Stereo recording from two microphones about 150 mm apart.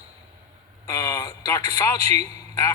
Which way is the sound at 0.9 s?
25° left (ahead or behind).